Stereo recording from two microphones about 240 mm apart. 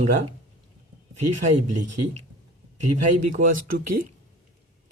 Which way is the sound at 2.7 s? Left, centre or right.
Right.